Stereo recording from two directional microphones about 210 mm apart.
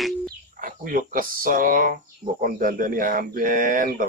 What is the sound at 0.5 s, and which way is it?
Speech, 40° right (ahead or behind).